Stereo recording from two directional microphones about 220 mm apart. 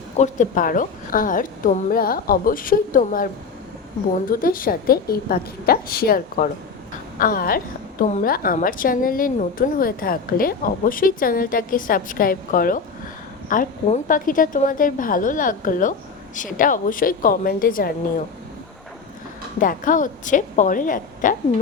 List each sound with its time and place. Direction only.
0.2 s a woman's voice: 35° left (ahead or behind)
4.3 s a woman's voice: 40° left (ahead or behind)
19.5 s a woman's voice: 35° left (ahead or behind)